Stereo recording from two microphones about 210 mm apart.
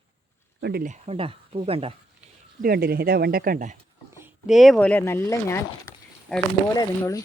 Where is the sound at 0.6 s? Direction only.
45° right (ahead or behind).